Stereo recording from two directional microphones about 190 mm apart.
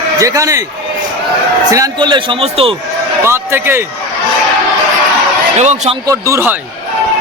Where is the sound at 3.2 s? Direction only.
10° right (ahead or behind).